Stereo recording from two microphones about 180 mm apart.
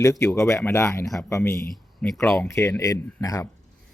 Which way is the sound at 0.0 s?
15° left (ahead or behind).